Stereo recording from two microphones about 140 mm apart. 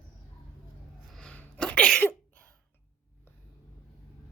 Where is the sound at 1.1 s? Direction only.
5° left (ahead or behind).